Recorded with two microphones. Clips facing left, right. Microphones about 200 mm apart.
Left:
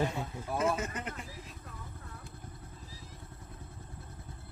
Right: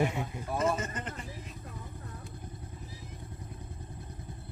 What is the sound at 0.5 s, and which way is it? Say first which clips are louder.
Speech: right 1 dB; 5° left (ahead or behind).